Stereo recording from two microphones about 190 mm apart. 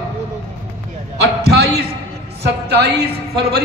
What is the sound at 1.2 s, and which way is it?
A man's voice, 60° right (ahead or behind).